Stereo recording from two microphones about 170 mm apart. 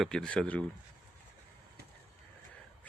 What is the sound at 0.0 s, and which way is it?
Speech, 5° left (ahead or behind).